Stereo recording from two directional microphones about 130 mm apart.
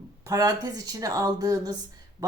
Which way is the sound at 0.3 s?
25° right (ahead or behind).